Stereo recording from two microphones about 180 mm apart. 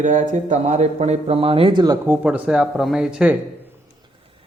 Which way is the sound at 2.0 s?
10° right (ahead or behind).